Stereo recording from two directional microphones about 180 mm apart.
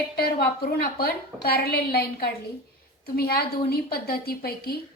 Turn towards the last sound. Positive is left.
turn(degrees=60)  # may be behind; listen again after turning